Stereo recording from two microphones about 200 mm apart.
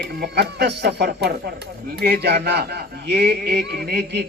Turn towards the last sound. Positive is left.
turn(degrees=-55)  # may be behind; listen again after turning